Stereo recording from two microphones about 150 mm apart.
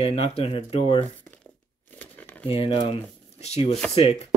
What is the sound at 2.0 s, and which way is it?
Crumpling, 10° left (ahead or behind).